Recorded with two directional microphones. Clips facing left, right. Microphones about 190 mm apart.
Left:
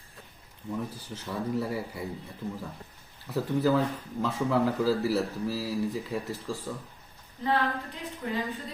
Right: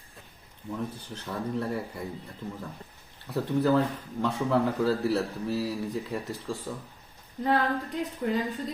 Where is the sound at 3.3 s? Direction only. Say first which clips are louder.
Right 1 dB; centre (ahead or behind).